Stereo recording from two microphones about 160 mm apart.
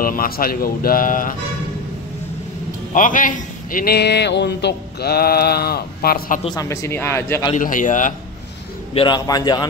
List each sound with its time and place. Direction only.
0.0 s speech: 65° left (ahead or behind)
2.9 s a man's voice: 55° left (ahead or behind)
6.5 s a man's voice: 20° left (ahead or behind)
7.5 s a man's voice: 55° left (ahead or behind)
8.9 s a man's voice: 30° left (ahead or behind)